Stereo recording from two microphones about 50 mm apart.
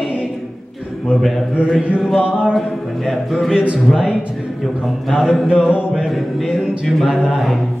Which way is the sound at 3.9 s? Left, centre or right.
Centre.